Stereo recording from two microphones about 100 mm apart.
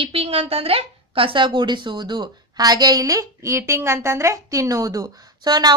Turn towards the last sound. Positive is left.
turn(degrees=-45)  # may be behind; listen again after turning